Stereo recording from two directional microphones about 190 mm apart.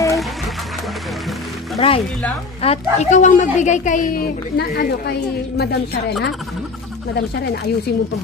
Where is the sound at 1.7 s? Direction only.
30° left (ahead or behind).